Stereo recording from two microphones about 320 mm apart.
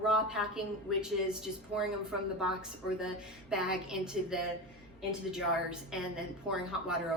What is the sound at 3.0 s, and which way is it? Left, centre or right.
A woman's voice, centre.